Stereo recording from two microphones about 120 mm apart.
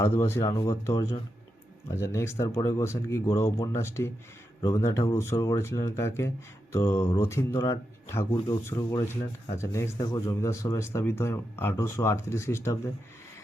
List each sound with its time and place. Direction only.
0.0 s speech: 20° left (ahead or behind)